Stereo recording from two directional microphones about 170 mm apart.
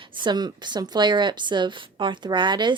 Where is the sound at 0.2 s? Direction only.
25° right (ahead or behind).